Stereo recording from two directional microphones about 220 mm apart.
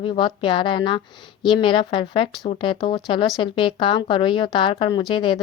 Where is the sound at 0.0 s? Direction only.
20° left (ahead or behind).